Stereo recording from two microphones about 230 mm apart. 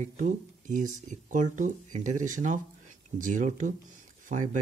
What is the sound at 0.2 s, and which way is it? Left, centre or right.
Speech, right.